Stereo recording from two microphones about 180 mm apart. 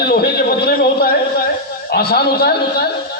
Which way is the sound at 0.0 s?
60° left (ahead or behind).